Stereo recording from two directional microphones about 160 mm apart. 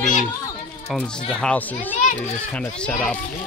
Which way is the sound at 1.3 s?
5° left (ahead or behind).